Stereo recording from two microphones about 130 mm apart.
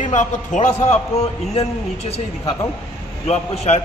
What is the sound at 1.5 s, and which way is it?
A man's voice, 50° left (ahead or behind).